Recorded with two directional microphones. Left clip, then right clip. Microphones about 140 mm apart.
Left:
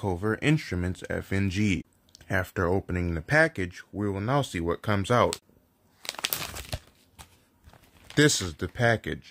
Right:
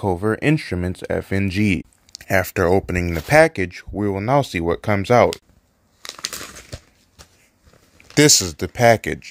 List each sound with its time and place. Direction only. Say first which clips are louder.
0.0 s speech: right 8 dB; 35° right (ahead or behind)
2.1 s speech: right 10 dB; 25° right (ahead or behind)
8.1 s speech: right 9 dB; 20° right (ahead or behind)